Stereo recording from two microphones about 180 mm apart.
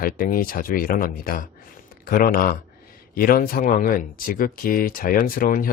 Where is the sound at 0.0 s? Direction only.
55° left (ahead or behind).